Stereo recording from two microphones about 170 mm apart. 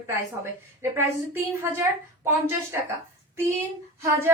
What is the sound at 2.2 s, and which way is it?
Speech, 15° right (ahead or behind).